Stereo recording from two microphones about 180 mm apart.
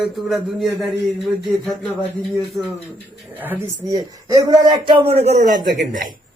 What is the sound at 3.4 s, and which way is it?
A man's voice, 10° right (ahead or behind).